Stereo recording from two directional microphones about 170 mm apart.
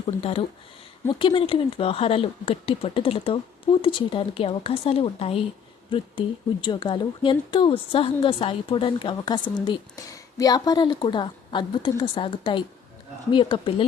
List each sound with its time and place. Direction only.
0.2 s speech: 35° left (ahead or behind)